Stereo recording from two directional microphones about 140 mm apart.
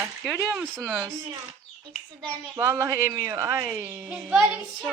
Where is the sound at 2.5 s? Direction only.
20° right (ahead or behind).